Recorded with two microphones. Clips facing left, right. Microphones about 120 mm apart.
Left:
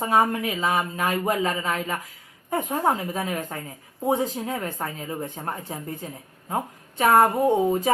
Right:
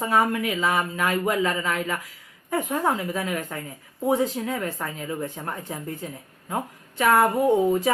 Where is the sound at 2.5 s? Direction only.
35° left (ahead or behind).